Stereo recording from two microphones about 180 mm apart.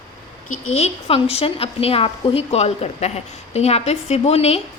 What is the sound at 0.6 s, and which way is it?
A woman's voice, 35° left (ahead or behind).